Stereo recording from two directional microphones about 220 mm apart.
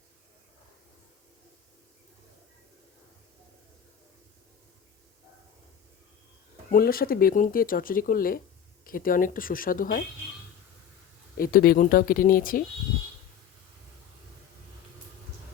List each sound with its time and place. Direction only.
6.7 s speech: 40° left (ahead or behind)
11.3 s speech: 40° left (ahead or behind)